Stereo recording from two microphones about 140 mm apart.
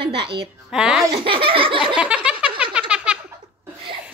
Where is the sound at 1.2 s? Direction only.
40° right (ahead or behind).